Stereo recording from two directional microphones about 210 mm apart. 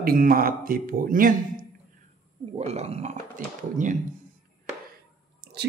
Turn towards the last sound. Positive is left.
turn(degrees=-50)  # may be behind; listen again after turning